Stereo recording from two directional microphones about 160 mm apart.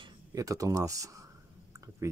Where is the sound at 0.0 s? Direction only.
20° right (ahead or behind).